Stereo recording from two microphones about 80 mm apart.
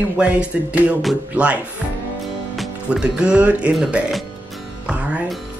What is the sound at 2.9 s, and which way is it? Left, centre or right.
Speech, centre.